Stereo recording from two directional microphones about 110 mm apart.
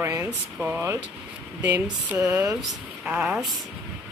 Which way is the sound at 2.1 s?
25° right (ahead or behind).